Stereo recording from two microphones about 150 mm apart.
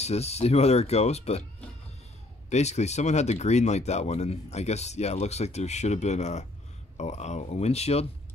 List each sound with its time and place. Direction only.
0.0 s speech: 45° left (ahead or behind)
2.5 s speech: 50° left (ahead or behind)